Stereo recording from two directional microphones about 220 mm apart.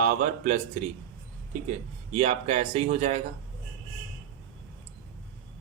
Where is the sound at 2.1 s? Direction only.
30° right (ahead or behind).